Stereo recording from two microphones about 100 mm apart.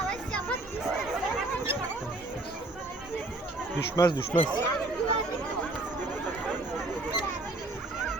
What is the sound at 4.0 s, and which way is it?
Speech, 40° left (ahead or behind).